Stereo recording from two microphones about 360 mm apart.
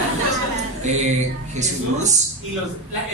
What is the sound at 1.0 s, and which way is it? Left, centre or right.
Speech, centre.